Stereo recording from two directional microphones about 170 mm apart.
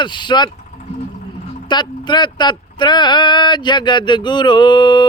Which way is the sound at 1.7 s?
25° left (ahead or behind).